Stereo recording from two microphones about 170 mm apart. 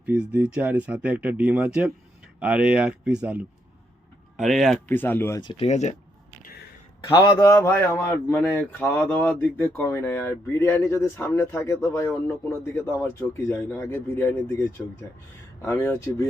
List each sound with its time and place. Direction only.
0.0 s speech: 10° right (ahead or behind)
4.9 s speech: 10° left (ahead or behind)
5.4 s a man's voice: 25° left (ahead or behind)
5.6 s speech: 40° left (ahead or behind)
7.0 s a man's voice: 25° left (ahead or behind)
15.6 s speech: 15° left (ahead or behind)